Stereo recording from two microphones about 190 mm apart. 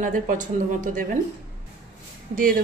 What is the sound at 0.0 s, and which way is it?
A woman's voice, 45° right (ahead or behind).